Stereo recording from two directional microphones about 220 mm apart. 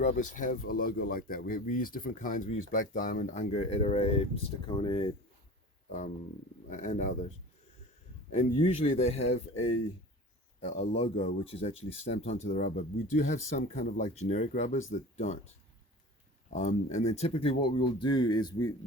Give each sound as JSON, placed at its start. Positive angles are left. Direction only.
{"t": 0.0, "sound": "speech", "side_deg": 35}
{"t": 6.7, "sound": "speech", "side_deg": 35}
{"t": 10.8, "sound": "speech", "side_deg": 30}
{"t": 16.5, "sound": "speech", "side_deg": 30}